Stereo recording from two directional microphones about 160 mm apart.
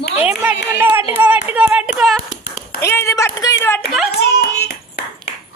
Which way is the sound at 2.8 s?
15° left (ahead or behind).